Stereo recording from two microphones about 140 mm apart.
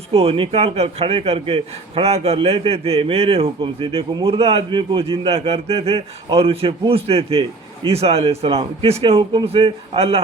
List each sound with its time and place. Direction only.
0.1 s a man's voice: 45° right (ahead or behind)